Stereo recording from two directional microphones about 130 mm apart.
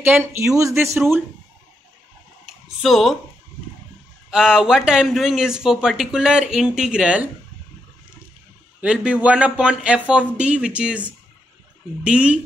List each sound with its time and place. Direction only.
0.0 s speech: 15° right (ahead or behind)
2.4 s a sound: centre (ahead or behind)
4.3 s speech: 5° right (ahead or behind)
8.8 s speech: 10° right (ahead or behind)
12.0 s speech: 10° right (ahead or behind)